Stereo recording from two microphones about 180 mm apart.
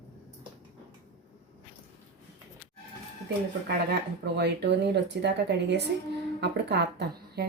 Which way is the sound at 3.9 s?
70° right (ahead or behind).